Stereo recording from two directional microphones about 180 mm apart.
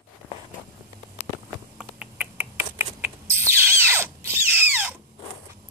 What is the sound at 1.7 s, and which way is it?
Bird, 5° right (ahead or behind).